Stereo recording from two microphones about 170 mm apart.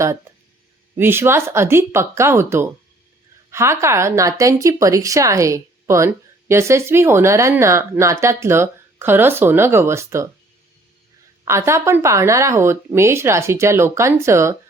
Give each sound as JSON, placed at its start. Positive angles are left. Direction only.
{"t": 0.9, "sound": "a woman's voice", "side_deg": -15}
{"t": 11.4, "sound": "a woman's voice", "side_deg": -15}